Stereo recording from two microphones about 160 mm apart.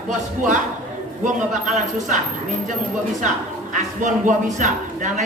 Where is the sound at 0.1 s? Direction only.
50° right (ahead or behind).